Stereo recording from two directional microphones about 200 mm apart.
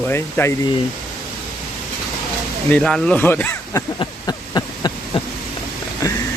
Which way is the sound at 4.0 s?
20° left (ahead or behind).